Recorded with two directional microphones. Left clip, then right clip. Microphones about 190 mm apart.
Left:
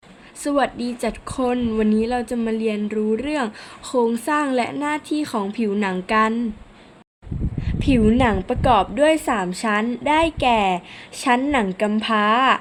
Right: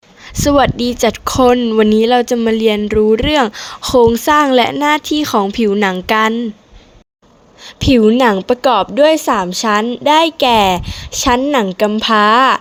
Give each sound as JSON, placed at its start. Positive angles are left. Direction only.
{"t": 0.3, "sound": "speech", "side_deg": -45}
{"t": 7.8, "sound": "a woman's voice", "side_deg": -40}